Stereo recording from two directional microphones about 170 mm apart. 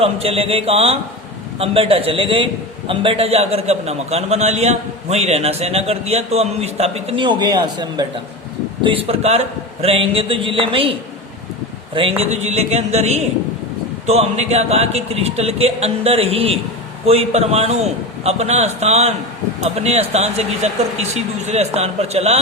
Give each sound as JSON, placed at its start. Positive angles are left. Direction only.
{"t": 0.0, "sound": "a man's voice", "side_deg": -35}
{"t": 11.9, "sound": "a man's voice", "side_deg": -35}